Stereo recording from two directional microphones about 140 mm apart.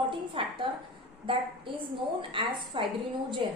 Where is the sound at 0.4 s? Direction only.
35° right (ahead or behind).